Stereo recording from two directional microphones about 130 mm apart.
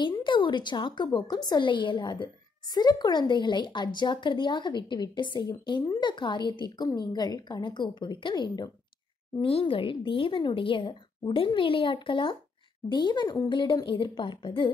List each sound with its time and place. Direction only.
0.0 s a woman's voice: 40° left (ahead or behind)
9.4 s a woman's voice: 45° left (ahead or behind)